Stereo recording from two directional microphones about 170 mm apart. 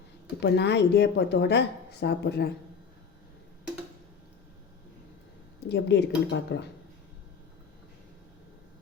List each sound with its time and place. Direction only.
0.3 s a woman's voice: 85° left
5.6 s speech: 85° left